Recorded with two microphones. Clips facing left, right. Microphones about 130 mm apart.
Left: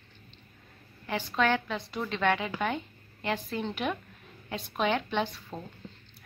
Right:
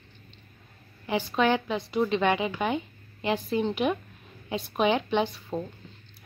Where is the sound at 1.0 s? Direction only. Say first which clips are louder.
Right 3 dB; 15° right (ahead or behind).